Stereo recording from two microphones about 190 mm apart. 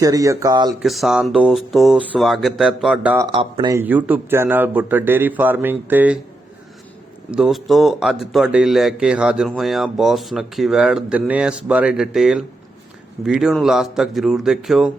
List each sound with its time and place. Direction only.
0.0 s speech: 20° right (ahead or behind)
0.8 s speech: centre (ahead or behind)
3.3 s speech: 25° right (ahead or behind)
3.8 s a man's voice: 10° right (ahead or behind)
7.3 s speech: 5° right (ahead or behind)